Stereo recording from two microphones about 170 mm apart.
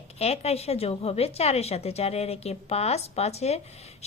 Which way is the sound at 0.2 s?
35° left (ahead or behind).